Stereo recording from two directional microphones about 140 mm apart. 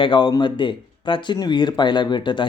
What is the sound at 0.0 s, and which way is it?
Speech, 35° left (ahead or behind).